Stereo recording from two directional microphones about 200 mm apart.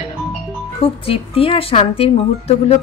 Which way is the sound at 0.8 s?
30° left (ahead or behind).